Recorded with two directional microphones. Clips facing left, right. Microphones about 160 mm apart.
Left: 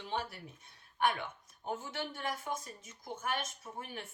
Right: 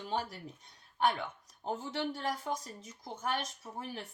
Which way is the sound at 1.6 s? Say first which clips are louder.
Right 4 dB; 30° right (ahead or behind).